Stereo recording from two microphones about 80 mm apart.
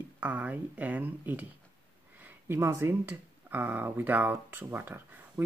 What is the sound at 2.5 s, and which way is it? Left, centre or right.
Speech, right.